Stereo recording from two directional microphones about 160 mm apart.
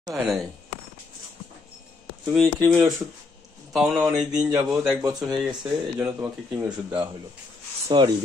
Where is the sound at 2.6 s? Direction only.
15° right (ahead or behind).